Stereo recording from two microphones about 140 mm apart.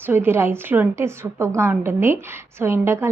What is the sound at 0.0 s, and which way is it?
A woman's voice, 15° right (ahead or behind).